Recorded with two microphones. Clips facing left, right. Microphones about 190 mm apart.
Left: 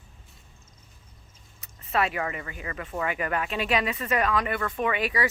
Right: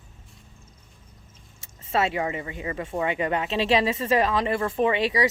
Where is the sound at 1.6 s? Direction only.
25° right (ahead or behind).